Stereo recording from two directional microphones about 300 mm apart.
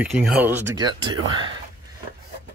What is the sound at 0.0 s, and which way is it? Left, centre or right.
Speech, centre.